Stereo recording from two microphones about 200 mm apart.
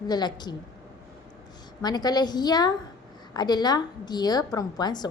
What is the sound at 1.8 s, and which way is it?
A woman's voice, 20° left (ahead or behind).